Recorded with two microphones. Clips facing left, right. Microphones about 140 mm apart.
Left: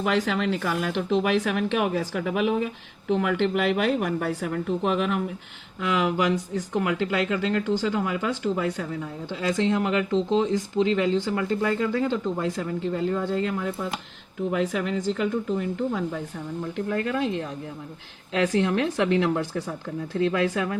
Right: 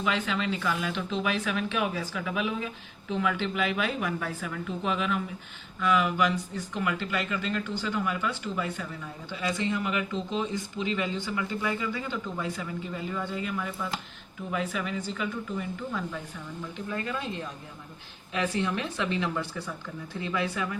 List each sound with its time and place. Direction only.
0.0 s speech: 65° left (ahead or behind)
5.8 s speech: 80° left
14.5 s speech: 85° left
15.9 s speech: 55° left (ahead or behind); by 17.5 s 75° left (ahead or behind)
18.3 s speech: 90° left